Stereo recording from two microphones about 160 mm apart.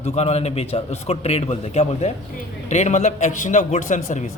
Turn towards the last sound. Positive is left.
turn(degrees=50)  # may be behind; listen again after turning